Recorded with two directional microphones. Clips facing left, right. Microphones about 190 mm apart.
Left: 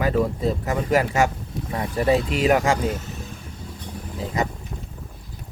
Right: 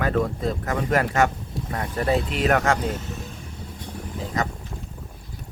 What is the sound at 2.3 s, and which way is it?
Speech, centre (ahead or behind).